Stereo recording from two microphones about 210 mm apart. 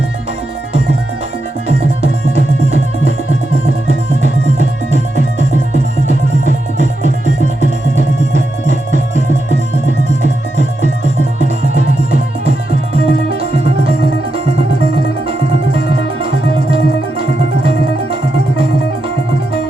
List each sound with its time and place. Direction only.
1.6 s music: 30° right (ahead or behind)
4.2 s music: 35° right (ahead or behind)
11.4 s music: 30° right (ahead or behind)
12.9 s music: 30° right (ahead or behind)
15.3 s music: 25° right (ahead or behind)